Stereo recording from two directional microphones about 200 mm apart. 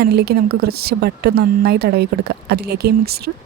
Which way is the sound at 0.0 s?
55° right (ahead or behind).